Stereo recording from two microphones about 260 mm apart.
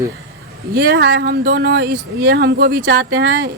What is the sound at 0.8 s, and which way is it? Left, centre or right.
A woman's voice, right.